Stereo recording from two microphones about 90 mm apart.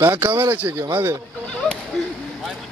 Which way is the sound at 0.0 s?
25° right (ahead or behind).